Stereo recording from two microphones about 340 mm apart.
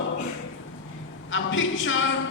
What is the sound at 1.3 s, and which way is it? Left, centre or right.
Speech, left.